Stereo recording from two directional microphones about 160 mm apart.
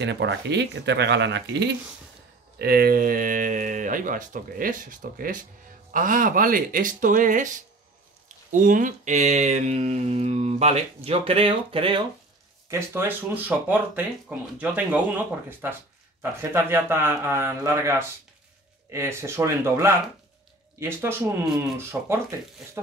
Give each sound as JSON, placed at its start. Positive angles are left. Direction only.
{"t": 0.0, "sound": "speech", "side_deg": -90}
{"t": 2.6, "sound": "speech", "side_deg": -75}
{"t": 8.5, "sound": "mantra", "side_deg": -55}
{"t": 12.6, "sound": "speech", "side_deg": -15}